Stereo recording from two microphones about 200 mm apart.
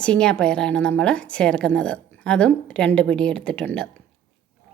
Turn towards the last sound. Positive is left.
turn(degrees=5)  # may be behind; listen again after turning